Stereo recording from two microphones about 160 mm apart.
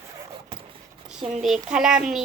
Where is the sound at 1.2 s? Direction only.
35° right (ahead or behind).